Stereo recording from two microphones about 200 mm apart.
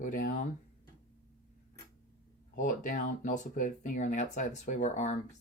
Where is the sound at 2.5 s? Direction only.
40° left (ahead or behind).